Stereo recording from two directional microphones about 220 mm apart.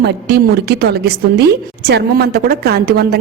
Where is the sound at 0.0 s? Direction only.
45° right (ahead or behind).